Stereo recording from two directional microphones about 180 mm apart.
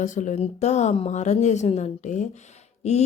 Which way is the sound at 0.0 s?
45° left (ahead or behind).